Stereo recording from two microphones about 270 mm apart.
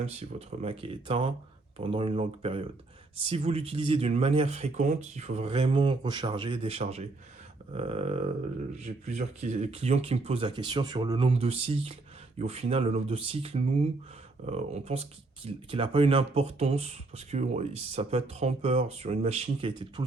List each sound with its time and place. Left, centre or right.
0.0 s speech: right